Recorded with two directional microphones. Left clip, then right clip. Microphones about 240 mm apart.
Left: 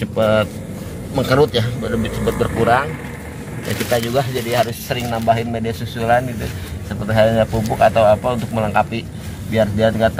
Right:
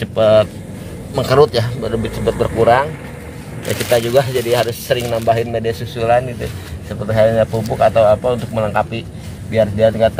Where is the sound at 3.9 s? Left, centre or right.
Right.